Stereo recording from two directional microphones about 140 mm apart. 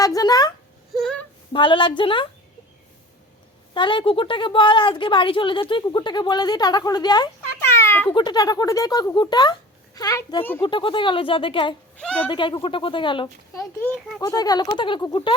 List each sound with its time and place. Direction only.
0.0 s speech: 25° left (ahead or behind)
0.9 s female singing: centre (ahead or behind)
1.5 s a woman's voice: 35° left (ahead or behind)
3.8 s a woman's voice: 35° left (ahead or behind)
7.6 s a sound: 20° left (ahead or behind)
8.1 s a woman's voice: 30° left (ahead or behind)
11.9 s speech: 10° left (ahead or behind)
12.3 s a woman's voice: 35° left (ahead or behind)
13.2 s a woman's voice: 20° left (ahead or behind); by 15.4 s 35° left (ahead or behind)